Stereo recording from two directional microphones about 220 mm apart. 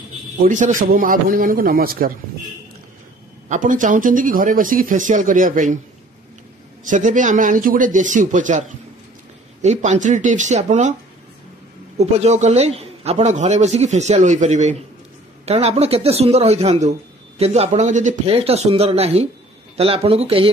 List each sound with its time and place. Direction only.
0.4 s a man's voice: 35° right (ahead or behind)
3.4 s a man's voice: 35° right (ahead or behind)
6.9 s a man's voice: 35° right (ahead or behind)
12.0 s a man's voice: 30° right (ahead or behind)